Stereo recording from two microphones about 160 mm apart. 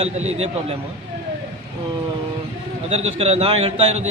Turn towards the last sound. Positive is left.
turn(degrees=-40)  # may be behind; listen again after turning